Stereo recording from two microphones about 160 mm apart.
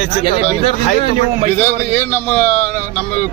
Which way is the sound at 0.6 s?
35° left (ahead or behind).